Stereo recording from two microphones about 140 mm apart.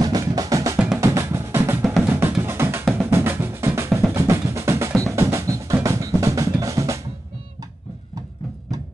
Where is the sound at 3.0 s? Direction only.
15° right (ahead or behind).